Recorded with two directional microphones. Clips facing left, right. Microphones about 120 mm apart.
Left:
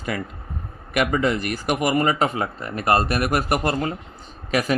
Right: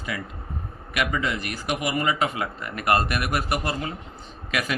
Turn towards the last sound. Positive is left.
turn(degrees=40)  # may be behind; listen again after turning